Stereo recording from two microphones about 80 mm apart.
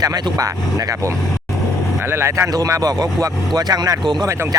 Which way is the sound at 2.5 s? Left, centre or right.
Right.